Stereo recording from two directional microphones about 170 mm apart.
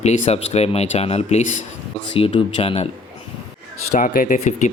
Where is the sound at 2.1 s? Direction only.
30° left (ahead or behind).